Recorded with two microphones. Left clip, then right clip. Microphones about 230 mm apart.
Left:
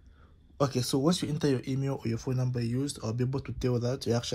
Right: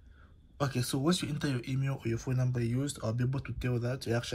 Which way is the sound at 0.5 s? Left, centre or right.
Left.